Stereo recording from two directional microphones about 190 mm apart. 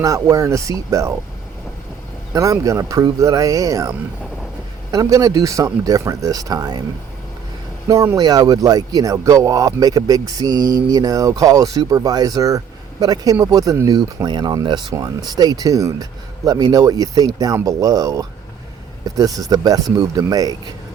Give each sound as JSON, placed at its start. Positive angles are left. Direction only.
{"t": 0.0, "sound": "speech", "side_deg": -15}
{"t": 2.3, "sound": "speech", "side_deg": -15}
{"t": 7.9, "sound": "speech", "side_deg": -15}